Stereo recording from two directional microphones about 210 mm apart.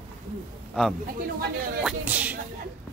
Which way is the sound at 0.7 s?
Centre (ahead or behind).